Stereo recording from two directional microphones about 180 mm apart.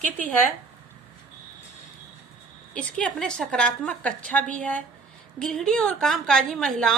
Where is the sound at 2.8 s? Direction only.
5° left (ahead or behind).